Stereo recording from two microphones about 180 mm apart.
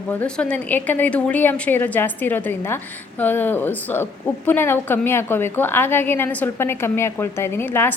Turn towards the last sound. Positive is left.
turn(degrees=10)  # may be behind; listen again after turning